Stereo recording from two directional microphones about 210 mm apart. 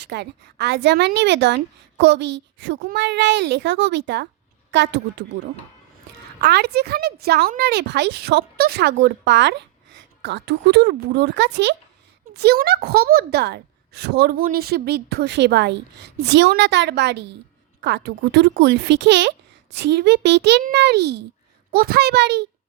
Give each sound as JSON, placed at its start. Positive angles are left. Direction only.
{"t": 0.0, "sound": "a woman's voice", "side_deg": -55}
{"t": 6.4, "sound": "a woman's voice", "side_deg": -50}